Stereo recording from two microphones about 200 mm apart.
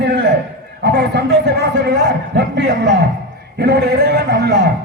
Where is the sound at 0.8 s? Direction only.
55° right (ahead or behind).